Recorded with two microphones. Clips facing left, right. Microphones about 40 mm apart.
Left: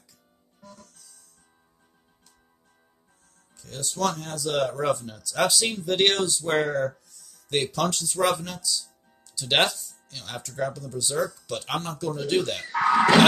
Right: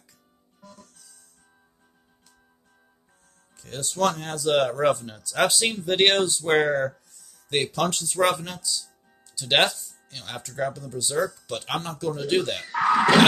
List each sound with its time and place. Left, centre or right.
3.5 s speech: right; by 12.6 s centre
12.7 s speech: centre